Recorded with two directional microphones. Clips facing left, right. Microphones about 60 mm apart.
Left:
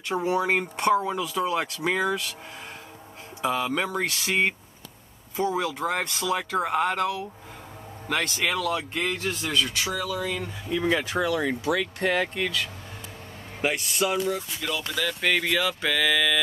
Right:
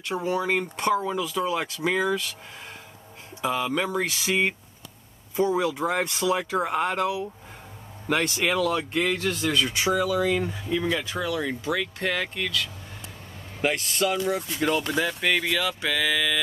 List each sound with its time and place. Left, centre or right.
0.1 s a man's voice: centre
3.4 s a man's voice: centre
3.8 s speech: centre
8.1 s a man's voice: centre
8.5 s speech: centre
9.7 s speech: centre
10.8 s speech: left
11.6 s speech: centre
12.0 s speech: left
12.4 s a man's voice: centre
13.6 s a man's voice: centre
14.6 s speech: right
15.1 s speech: centre